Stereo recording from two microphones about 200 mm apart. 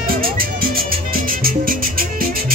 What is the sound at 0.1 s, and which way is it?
Music, 45° right (ahead or behind).